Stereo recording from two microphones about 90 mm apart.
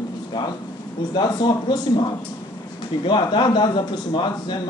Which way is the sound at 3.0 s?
60° left (ahead or behind).